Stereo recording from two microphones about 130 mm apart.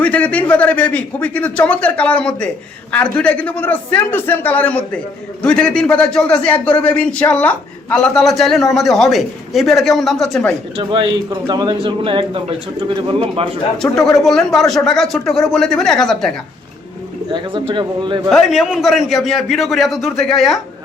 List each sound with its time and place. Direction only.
0.0 s a man's voice: 10° left (ahead or behind)
10.8 s a man's voice: 40° right (ahead or behind)
13.9 s a man's voice: centre (ahead or behind)
17.3 s a man's voice: 35° right (ahead or behind)
18.3 s a man's voice: centre (ahead or behind)